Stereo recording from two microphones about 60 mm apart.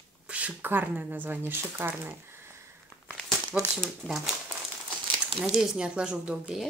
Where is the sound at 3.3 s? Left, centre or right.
Centre.